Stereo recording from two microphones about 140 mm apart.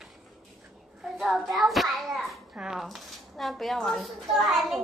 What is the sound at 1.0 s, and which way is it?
A child's voice, centre (ahead or behind).